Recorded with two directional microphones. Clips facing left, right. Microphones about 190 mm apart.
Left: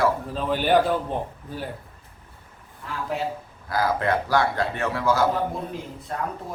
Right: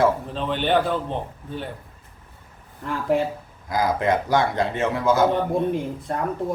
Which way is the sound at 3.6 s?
15° right (ahead or behind).